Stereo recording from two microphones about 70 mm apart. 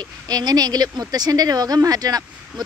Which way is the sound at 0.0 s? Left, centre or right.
Right.